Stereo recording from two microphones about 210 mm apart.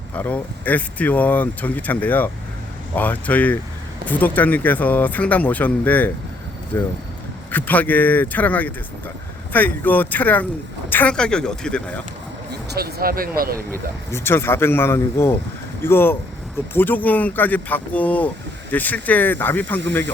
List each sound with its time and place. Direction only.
0.1 s speech: 5° left (ahead or behind)
12.5 s speech: 50° right (ahead or behind)
14.1 s speech: 10° left (ahead or behind)